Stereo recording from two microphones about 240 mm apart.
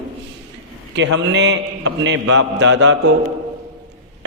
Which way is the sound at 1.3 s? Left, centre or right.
Right.